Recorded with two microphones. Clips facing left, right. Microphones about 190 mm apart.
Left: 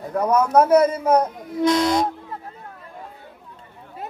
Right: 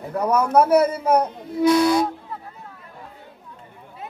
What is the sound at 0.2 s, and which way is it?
A man's voice, 10° right (ahead or behind).